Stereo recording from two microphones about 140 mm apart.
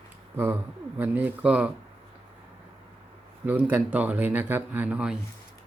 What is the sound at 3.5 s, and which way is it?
Speech, 10° right (ahead or behind).